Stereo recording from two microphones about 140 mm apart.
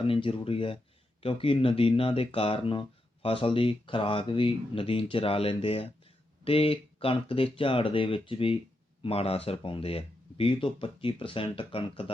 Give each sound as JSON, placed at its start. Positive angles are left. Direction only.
{"t": 0.1, "sound": "speech", "side_deg": 40}